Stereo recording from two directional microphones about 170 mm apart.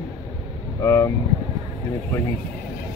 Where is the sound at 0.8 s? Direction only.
15° left (ahead or behind).